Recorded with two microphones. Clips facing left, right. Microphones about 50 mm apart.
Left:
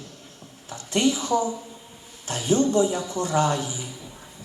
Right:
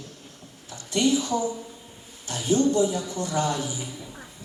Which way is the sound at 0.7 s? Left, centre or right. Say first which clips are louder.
Even; left.